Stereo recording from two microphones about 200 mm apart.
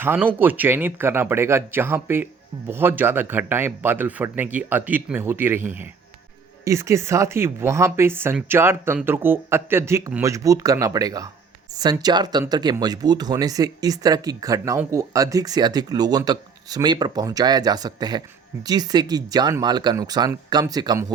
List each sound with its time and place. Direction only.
0.0 s speech: 10° right (ahead or behind)